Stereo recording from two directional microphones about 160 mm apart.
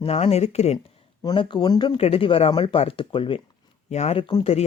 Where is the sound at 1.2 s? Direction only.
30° left (ahead or behind).